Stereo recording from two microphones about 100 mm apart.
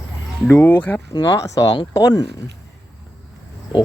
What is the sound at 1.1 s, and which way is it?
Speech, 35° left (ahead or behind).